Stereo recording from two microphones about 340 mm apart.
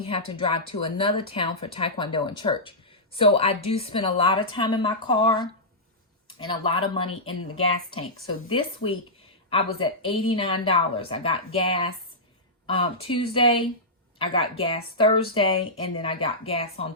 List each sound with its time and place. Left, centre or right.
0.0 s speech: centre
8.4 s speech: centre